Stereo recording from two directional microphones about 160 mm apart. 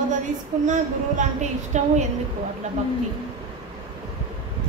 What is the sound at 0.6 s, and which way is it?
A woman's voice, 50° right (ahead or behind).